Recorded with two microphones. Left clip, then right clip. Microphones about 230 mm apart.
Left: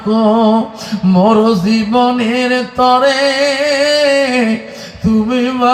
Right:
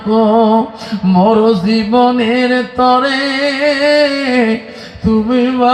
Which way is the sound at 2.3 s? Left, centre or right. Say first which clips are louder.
Even; left.